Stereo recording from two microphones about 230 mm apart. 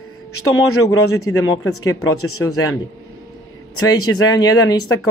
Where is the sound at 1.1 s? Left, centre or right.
Left.